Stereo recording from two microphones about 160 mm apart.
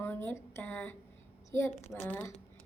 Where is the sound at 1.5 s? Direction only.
15° left (ahead or behind).